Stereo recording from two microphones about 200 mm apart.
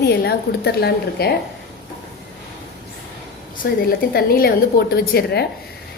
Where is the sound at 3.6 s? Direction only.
55° left (ahead or behind).